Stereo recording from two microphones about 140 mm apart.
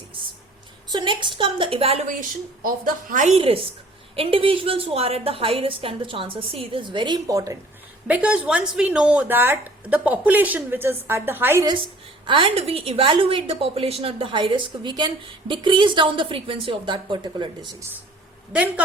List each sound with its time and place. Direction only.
0.9 s a woman's voice: 35° right (ahead or behind)
2.6 s a woman's voice: 80° right
3.3 s a woman's voice: 40° right (ahead or behind); by 7.6 s 25° right (ahead or behind)
8.0 s speech: 10° right (ahead or behind)
12.2 s a woman's voice: 40° right (ahead or behind)